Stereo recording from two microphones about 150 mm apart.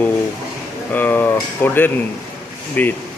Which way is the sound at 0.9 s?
10° left (ahead or behind).